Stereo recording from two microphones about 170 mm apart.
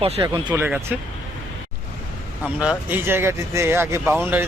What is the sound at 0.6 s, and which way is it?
Speech, 10° right (ahead or behind).